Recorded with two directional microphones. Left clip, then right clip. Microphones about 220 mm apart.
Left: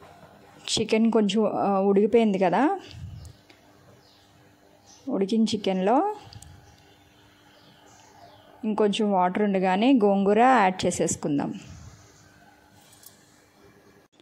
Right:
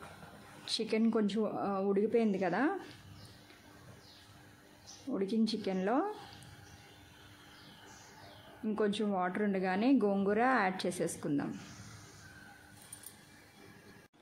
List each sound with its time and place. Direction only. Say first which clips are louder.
0.7 s a woman's voice: left 10 dB; 35° left (ahead or behind)
5.1 s a woman's voice: left 9 dB; 35° left (ahead or behind)
8.6 s a woman's voice: left 10 dB; 30° left (ahead or behind)